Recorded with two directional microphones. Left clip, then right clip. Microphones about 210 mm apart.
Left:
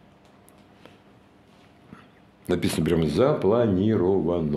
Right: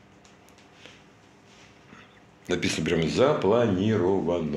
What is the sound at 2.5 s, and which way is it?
Speech, 50° left (ahead or behind).